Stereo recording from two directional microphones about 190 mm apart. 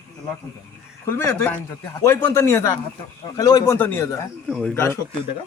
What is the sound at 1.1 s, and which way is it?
A man's voice, 10° left (ahead or behind).